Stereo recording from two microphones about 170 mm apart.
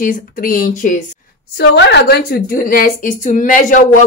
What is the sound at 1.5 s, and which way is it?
A woman's voice, 85° left.